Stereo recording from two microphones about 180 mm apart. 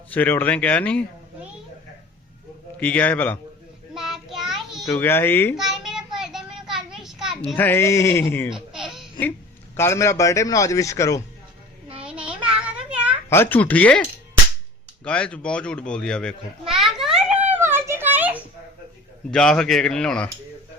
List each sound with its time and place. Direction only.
0.1 s a man's voice: 10° left (ahead or behind)
2.7 s a man's voice: 10° left (ahead or behind)
3.9 s child singing: centre (ahead or behind)
4.9 s a man's voice: 10° left (ahead or behind)
5.5 s child singing: centre (ahead or behind)
7.5 s a man's voice: 10° left (ahead or behind)
8.4 s baby laughter: 5° right (ahead or behind)
9.7 s a man's voice: 15° left (ahead or behind)
11.9 s child singing: 5° right (ahead or behind)
12.9 s a sound: 5° right (ahead or behind)
13.3 s a man's voice: 10° left (ahead or behind)
15.0 s a man's voice: 5° left (ahead or behind)
16.8 s a sound: centre (ahead or behind)
19.3 s a man's voice: 5° left (ahead or behind)